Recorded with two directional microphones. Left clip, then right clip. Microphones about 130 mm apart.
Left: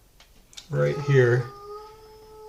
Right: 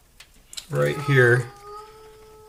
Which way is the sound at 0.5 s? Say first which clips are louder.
Right 2 dB; 30° right (ahead or behind).